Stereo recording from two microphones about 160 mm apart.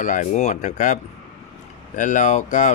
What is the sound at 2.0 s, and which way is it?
Speech, 50° left (ahead or behind).